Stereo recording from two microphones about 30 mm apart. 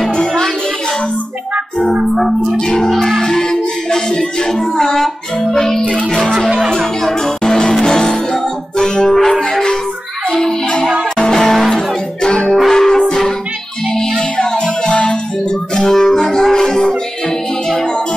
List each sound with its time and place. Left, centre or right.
0.1 s music: left
2.0 s speech: centre
2.5 s music: left
2.9 s music: centre
3.3 s music: left
11.4 s music: centre
11.7 s music: left
12.6 s music: centre
14.3 s music: left
15.7 s music: centre